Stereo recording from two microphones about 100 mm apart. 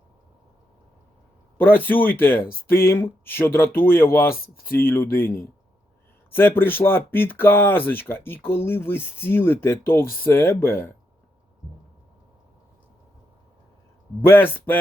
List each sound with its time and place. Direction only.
1.5 s speech: 20° left (ahead or behind)
14.2 s speech: 20° left (ahead or behind)